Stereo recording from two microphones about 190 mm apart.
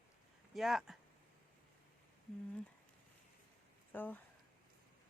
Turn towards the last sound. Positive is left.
turn(degrees=10)  # may be behind; listen again after turning